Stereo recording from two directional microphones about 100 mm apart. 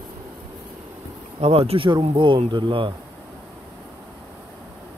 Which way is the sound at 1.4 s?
80° right.